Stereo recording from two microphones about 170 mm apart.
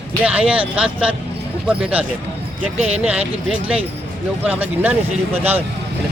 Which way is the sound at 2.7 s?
40° right (ahead or behind).